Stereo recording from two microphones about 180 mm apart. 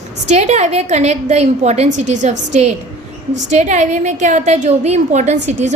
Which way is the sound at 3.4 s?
40° right (ahead or behind).